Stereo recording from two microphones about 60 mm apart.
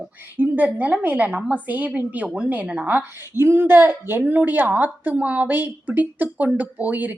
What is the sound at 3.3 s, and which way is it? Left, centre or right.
A woman's voice, right.